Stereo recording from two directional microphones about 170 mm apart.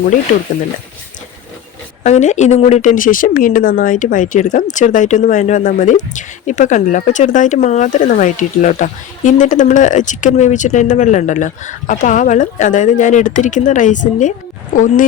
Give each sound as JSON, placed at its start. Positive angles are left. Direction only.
{"t": 2.0, "sound": "speech", "side_deg": 45}